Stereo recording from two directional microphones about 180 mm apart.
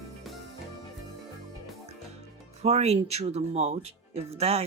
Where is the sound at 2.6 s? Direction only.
35° right (ahead or behind).